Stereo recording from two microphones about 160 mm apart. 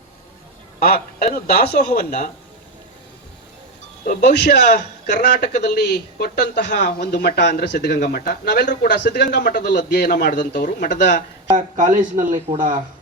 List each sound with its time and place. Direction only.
0.8 s a man's voice: 70° left (ahead or behind)
2.0 s speech: 50° left (ahead or behind)
4.0 s speech: 75° left (ahead or behind); by 8.7 s 90° left
8.7 s a man's voice: 75° left (ahead or behind)
11.5 s speech: 55° right (ahead or behind)